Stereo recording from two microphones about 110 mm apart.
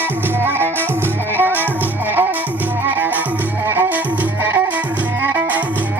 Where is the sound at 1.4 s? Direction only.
15° right (ahead or behind).